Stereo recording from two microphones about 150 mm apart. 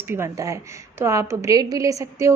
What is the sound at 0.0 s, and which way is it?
A woman's voice, 15° right (ahead or behind).